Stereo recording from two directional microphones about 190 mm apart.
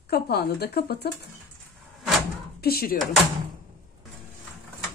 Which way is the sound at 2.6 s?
55° left (ahead or behind).